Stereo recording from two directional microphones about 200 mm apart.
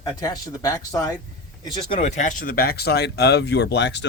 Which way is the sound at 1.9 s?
35° left (ahead or behind).